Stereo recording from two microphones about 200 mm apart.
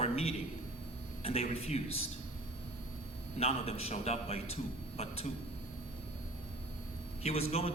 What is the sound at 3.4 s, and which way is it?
Speech, 30° left (ahead or behind).